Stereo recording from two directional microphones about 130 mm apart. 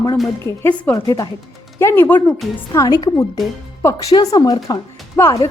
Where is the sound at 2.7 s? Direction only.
25° left (ahead or behind).